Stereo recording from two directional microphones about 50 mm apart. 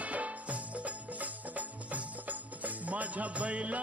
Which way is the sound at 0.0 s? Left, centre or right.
Right.